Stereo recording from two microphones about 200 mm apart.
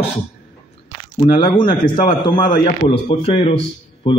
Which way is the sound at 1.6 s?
25° left (ahead or behind).